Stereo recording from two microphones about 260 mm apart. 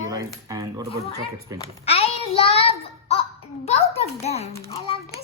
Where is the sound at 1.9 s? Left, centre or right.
Left.